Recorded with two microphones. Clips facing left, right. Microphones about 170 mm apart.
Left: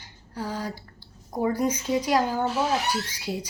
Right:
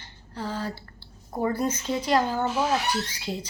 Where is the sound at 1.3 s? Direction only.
10° left (ahead or behind).